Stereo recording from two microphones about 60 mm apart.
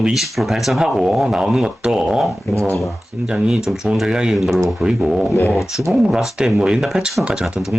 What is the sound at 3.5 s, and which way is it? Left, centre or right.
Speech, centre.